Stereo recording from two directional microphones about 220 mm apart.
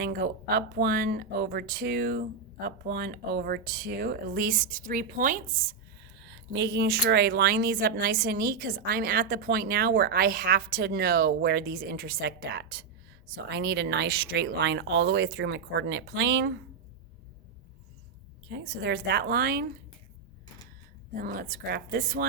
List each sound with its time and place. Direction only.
0.0 s a woman's voice: 45° right (ahead or behind)
6.1 s a woman's voice: 50° right (ahead or behind)
18.4 s a woman's voice: 50° right (ahead or behind)
21.2 s a woman's voice: 40° right (ahead or behind)